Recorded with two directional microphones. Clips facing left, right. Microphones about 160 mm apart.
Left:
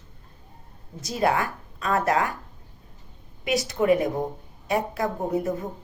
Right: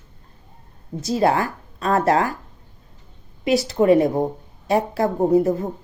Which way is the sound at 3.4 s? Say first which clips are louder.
Right 5 dB; 30° right (ahead or behind).